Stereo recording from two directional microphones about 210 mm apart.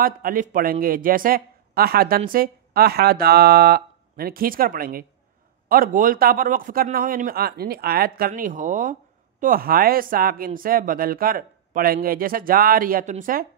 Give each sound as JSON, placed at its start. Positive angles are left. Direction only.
{"t": 0.0, "sound": "speech", "side_deg": -40}